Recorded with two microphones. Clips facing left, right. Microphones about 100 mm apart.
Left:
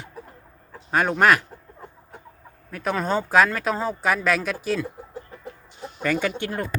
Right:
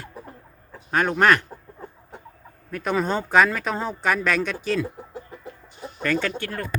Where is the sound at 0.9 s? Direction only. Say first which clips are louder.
Even; 5° left (ahead or behind).